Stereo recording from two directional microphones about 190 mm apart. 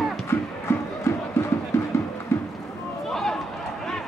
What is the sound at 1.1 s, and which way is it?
Crowd, 15° left (ahead or behind).